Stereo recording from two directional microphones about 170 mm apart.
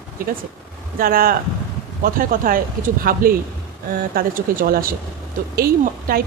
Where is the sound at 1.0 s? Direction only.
60° right (ahead or behind).